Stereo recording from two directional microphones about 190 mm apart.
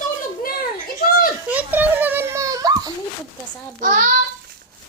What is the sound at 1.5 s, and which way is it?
Children playing, 10° right (ahead or behind).